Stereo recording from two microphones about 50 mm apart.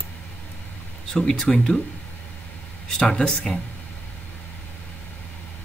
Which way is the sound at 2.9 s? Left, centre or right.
Centre.